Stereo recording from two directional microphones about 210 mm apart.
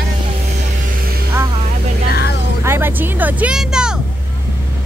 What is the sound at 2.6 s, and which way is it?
Vehicle, 10° right (ahead or behind).